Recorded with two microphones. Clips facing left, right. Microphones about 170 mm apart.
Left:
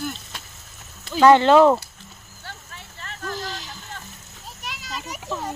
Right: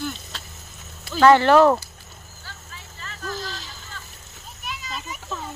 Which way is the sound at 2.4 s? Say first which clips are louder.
Left 4 dB; 60° left (ahead or behind).